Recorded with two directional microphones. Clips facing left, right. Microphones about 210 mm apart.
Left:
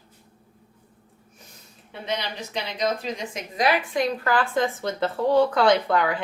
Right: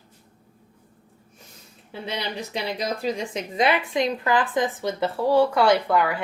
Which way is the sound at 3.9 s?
20° right (ahead or behind).